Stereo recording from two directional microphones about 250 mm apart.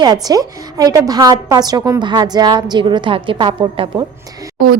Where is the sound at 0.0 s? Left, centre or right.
Centre.